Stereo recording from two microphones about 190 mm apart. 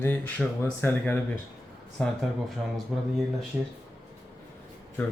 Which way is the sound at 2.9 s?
5° right (ahead or behind).